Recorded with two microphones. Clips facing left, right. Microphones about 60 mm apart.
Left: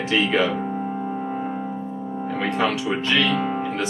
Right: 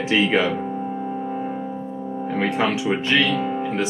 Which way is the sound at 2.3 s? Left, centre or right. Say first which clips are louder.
Right 1 dB; centre.